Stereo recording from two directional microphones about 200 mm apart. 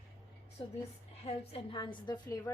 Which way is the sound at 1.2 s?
30° left (ahead or behind).